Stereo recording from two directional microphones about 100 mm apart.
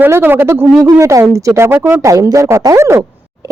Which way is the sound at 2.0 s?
35° right (ahead or behind).